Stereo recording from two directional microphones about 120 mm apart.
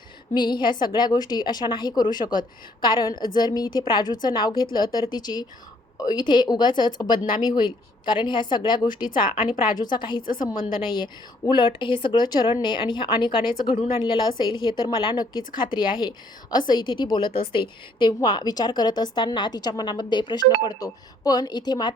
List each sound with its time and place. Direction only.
0.3 s a woman's voice: 40° left (ahead or behind)